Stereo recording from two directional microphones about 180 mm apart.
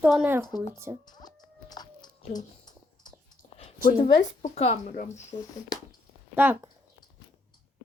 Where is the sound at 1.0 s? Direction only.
20° left (ahead or behind).